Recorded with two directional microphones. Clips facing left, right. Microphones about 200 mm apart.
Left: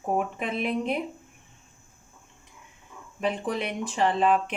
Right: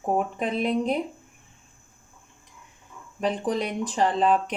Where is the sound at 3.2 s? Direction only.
35° right (ahead or behind).